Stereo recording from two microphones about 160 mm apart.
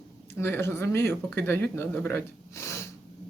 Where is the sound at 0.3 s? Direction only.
15° left (ahead or behind).